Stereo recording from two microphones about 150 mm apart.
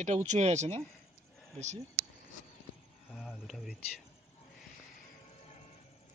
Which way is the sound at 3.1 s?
Centre (ahead or behind).